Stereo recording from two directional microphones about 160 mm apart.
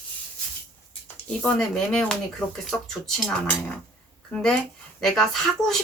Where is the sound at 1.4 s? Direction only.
5° left (ahead or behind).